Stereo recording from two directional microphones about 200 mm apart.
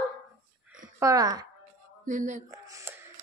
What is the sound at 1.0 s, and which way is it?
Speech, 15° right (ahead or behind).